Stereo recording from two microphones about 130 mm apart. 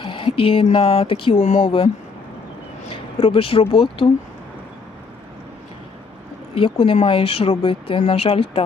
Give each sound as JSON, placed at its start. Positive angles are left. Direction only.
{"t": 0.0, "sound": "speech", "side_deg": 40}
{"t": 1.4, "sound": "speech", "side_deg": 80}
{"t": 1.6, "sound": "speech", "side_deg": 45}
{"t": 2.9, "sound": "speech", "side_deg": 45}
{"t": 6.5, "sound": "speech", "side_deg": 45}